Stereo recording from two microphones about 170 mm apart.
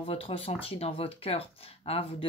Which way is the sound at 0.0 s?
35° left (ahead or behind).